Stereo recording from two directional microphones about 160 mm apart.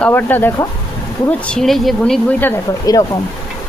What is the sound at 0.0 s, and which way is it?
Speech, 10° left (ahead or behind).